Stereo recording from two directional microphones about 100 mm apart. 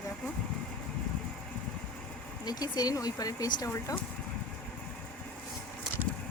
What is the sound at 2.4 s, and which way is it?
Speech, 40° left (ahead or behind).